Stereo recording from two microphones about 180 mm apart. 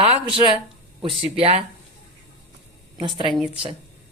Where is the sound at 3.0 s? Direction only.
30° right (ahead or behind).